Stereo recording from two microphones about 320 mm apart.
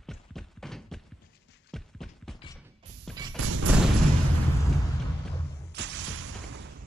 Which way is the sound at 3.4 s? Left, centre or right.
Right.